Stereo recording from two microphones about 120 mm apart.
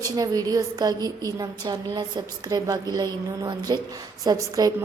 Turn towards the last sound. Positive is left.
turn(degrees=-30)  # may be behind; listen again after turning